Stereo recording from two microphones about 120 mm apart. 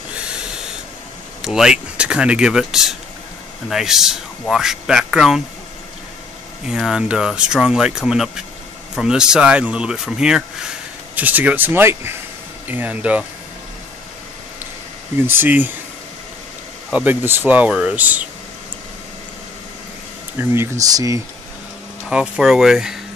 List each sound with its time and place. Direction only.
0.1 s snort: 10° right (ahead or behind)
1.4 s speech: 5° right (ahead or behind)
6.7 s speech: 5° right (ahead or behind)
15.2 s speech: 15° right (ahead or behind)
16.9 s speech: 15° right (ahead or behind)
20.3 s speech: 25° right (ahead or behind)
22.1 s speech: 5° right (ahead or behind)